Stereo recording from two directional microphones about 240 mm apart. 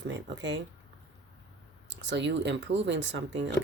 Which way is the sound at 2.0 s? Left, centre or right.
Right.